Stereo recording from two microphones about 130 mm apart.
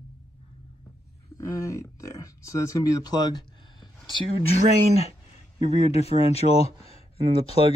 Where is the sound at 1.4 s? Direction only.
25° left (ahead or behind).